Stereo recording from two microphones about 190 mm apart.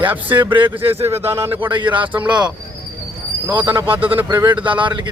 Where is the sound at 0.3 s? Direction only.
10° right (ahead or behind).